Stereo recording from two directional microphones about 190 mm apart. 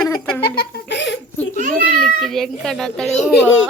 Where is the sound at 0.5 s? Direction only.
55° left (ahead or behind).